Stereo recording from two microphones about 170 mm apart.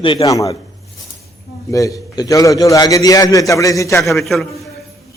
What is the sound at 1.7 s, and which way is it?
A man's voice, 20° left (ahead or behind).